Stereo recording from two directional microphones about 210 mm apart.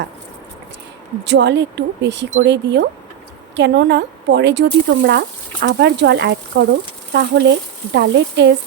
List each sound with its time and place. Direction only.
1.2 s speech: 55° right (ahead or behind)